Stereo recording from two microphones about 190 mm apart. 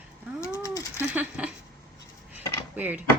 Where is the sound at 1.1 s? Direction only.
10° right (ahead or behind).